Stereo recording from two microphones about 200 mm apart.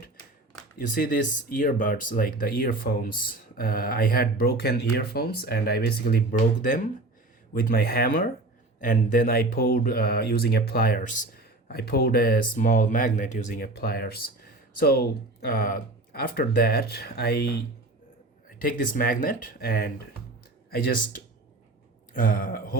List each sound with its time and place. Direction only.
0.9 s speech: 45° left (ahead or behind)
18.6 s speech: 45° left (ahead or behind)
22.1 s speech: 45° left (ahead or behind)